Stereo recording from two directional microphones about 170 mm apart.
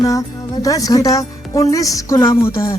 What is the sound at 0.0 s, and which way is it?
Speech, 20° left (ahead or behind).